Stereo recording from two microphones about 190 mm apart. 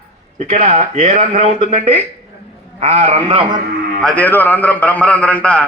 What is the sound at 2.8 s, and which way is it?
Speech, 35° right (ahead or behind).